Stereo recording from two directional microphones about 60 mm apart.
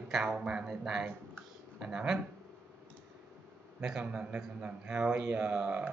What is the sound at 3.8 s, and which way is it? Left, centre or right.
A man's voice, centre.